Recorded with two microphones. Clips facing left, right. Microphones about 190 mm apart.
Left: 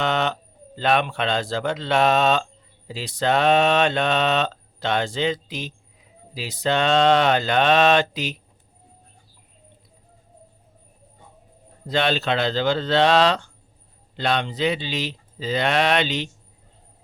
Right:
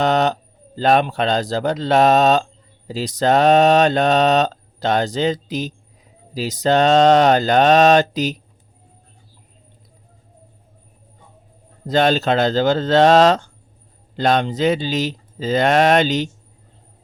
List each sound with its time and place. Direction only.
0.0 s a sound: 40° right (ahead or behind)
0.8 s speech: 40° right (ahead or behind)
11.9 s speech: 45° right (ahead or behind)